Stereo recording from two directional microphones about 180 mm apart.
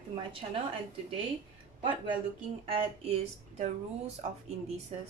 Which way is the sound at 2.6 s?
30° right (ahead or behind).